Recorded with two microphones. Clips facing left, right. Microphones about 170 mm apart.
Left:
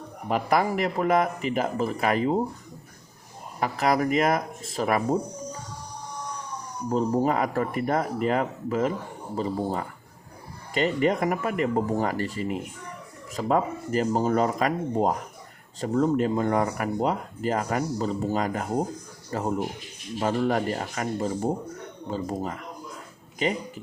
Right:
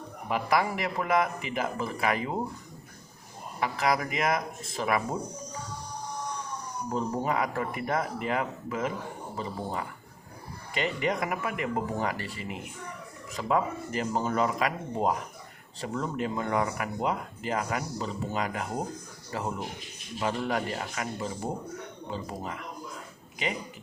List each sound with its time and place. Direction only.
0.3 s speech: 40° left (ahead or behind)
3.6 s speech: 40° left (ahead or behind)
6.9 s speech: 40° left (ahead or behind)